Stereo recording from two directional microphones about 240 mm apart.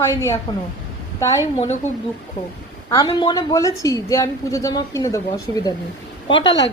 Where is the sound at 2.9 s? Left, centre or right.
Centre.